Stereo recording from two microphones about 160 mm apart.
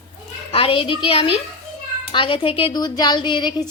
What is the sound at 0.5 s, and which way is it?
A woman's voice, 35° left (ahead or behind).